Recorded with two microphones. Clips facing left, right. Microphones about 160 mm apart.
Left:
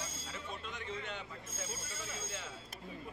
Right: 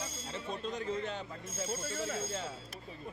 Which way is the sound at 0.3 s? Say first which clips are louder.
Right 10 dB; 35° right (ahead or behind).